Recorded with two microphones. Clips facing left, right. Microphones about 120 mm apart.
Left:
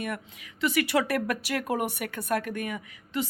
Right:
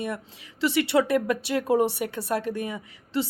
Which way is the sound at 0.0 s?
30° right (ahead or behind).